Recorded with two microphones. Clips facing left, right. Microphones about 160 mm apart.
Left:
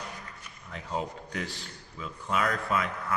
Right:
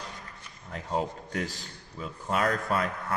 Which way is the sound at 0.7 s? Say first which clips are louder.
Right 3 dB; 40° right (ahead or behind).